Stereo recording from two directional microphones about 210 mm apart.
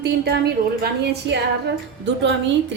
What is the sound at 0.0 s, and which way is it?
Speech, 50° right (ahead or behind).